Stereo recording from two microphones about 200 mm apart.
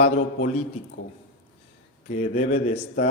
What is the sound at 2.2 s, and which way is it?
Speech, 30° left (ahead or behind).